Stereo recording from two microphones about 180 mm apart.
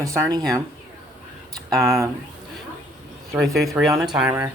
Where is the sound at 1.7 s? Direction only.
Centre (ahead or behind).